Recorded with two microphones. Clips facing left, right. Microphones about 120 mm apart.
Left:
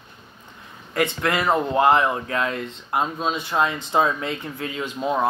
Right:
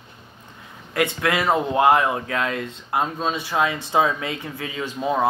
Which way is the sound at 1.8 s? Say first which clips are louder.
Right 1 dB; 55° right (ahead or behind).